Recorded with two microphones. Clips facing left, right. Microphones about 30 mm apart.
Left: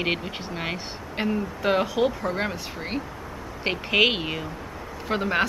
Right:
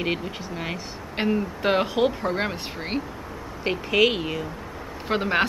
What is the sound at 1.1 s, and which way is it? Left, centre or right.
Speech, centre.